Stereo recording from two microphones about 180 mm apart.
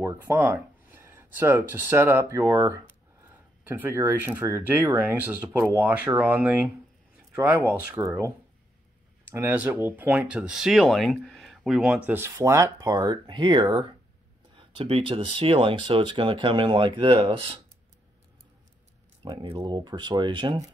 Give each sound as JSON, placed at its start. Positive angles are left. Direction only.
{"t": 0.0, "sound": "speech", "side_deg": -15}
{"t": 9.3, "sound": "speech", "side_deg": -15}
{"t": 19.2, "sound": "speech", "side_deg": -30}